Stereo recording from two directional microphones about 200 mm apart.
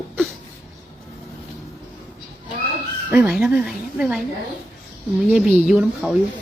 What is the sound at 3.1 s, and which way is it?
A woman's voice, 5° right (ahead or behind).